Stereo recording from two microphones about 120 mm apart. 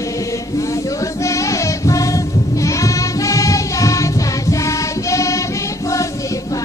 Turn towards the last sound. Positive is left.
turn(degrees=25)  # may be behind; listen again after turning